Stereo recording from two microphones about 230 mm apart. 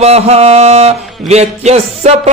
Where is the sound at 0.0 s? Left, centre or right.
Right.